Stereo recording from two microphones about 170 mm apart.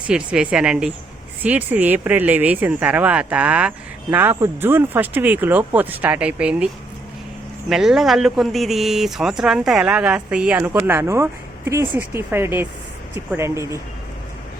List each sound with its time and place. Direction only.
0.1 s speech: 5° right (ahead or behind)
7.7 s speech: centre (ahead or behind)